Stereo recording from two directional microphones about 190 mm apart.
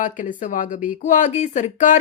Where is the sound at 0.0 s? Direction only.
45° left (ahead or behind).